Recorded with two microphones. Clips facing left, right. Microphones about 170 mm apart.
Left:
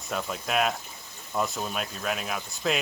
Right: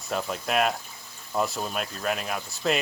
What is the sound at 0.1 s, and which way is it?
Speech, centre (ahead or behind).